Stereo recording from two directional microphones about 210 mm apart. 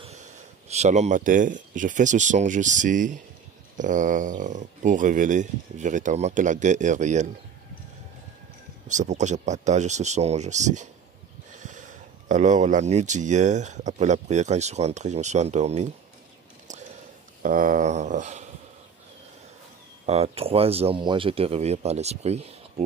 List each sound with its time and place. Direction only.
0.0 s speech: 30° right (ahead or behind)
8.8 s speech: 35° right (ahead or behind)
17.4 s speech: 40° right (ahead or behind)
20.1 s speech: 30° right (ahead or behind)